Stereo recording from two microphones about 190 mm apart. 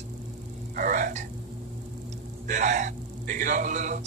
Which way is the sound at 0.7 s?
45° right (ahead or behind).